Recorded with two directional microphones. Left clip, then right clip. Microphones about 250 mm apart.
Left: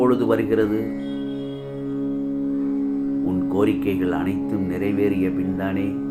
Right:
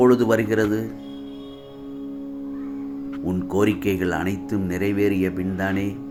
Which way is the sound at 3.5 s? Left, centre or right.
Right.